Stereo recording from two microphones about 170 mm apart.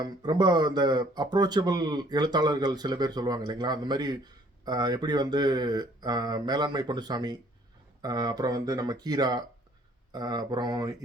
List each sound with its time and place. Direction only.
0.0 s speech: 25° right (ahead or behind)